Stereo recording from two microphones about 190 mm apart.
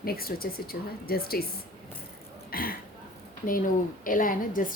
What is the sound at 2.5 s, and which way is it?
Speech, 50° left (ahead or behind).